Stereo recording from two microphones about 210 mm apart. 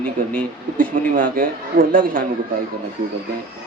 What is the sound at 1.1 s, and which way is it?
Speech, 40° right (ahead or behind).